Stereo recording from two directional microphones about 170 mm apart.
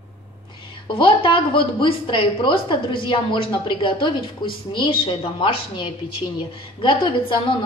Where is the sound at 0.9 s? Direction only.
30° left (ahead or behind).